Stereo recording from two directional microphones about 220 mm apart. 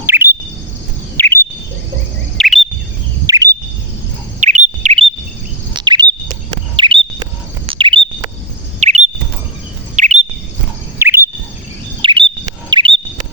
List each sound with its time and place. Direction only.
0.0 s chirp: 10° right (ahead or behind)
1.1 s chirp: 10° left (ahead or behind)
2.4 s chirp: centre (ahead or behind)
3.2 s chirp: 15° right (ahead or behind)
4.4 s bird: 35° right (ahead or behind)
6.7 s chirp: 25° right (ahead or behind)
7.7 s bird: 25° right (ahead or behind)
9.9 s chirp: 35° right (ahead or behind)
11.0 s chirp: 10° right (ahead or behind)
12.0 s chirp: 25° right (ahead or behind)
12.7 s bird: 20° right (ahead or behind)